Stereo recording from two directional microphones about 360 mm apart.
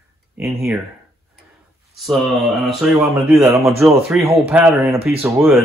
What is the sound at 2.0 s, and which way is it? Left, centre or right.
Speech, centre.